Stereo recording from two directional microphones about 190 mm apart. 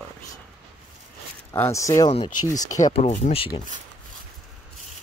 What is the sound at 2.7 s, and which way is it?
Speech, 40° left (ahead or behind).